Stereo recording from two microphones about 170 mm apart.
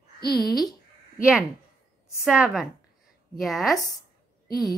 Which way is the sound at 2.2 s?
5° right (ahead or behind).